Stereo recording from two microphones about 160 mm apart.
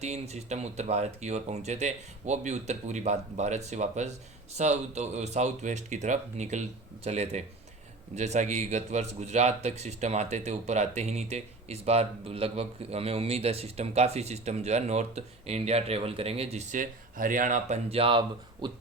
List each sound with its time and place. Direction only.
0.0 s speech: 45° right (ahead or behind)